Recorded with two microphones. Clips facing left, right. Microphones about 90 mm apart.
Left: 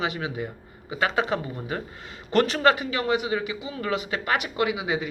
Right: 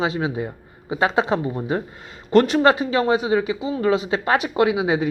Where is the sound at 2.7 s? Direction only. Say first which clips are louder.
Right 6 dB; 30° right (ahead or behind).